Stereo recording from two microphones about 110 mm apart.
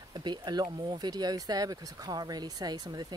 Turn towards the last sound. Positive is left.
turn(degrees=-40)  # may be behind; listen again after turning